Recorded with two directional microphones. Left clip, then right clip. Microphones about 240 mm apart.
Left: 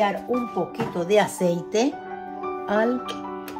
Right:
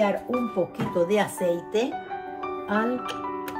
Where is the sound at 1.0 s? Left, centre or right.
Left.